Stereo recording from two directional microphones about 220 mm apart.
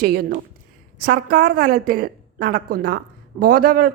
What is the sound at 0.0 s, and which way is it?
A woman's voice, 45° right (ahead or behind).